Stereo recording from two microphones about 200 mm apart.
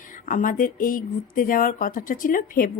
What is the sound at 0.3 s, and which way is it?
Speech, 40° left (ahead or behind).